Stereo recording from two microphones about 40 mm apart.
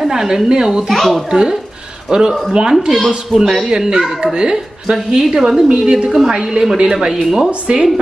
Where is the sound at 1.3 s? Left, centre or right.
Centre.